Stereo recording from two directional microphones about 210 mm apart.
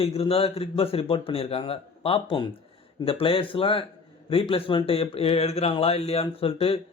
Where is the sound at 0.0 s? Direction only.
30° left (ahead or behind).